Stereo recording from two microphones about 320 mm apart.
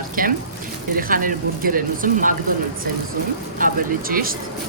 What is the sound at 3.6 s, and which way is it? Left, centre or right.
Speech, right.